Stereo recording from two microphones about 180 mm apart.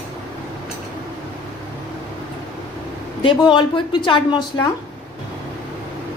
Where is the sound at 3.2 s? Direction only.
25° left (ahead or behind).